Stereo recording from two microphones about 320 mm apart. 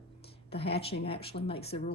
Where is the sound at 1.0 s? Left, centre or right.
Centre.